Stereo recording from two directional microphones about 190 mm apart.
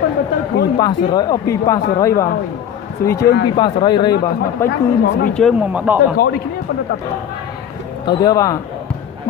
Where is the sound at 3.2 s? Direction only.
55° left (ahead or behind).